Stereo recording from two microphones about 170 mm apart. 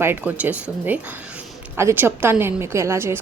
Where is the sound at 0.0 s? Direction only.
10° right (ahead or behind).